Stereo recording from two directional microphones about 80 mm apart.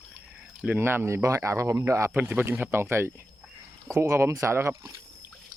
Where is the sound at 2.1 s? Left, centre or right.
Right.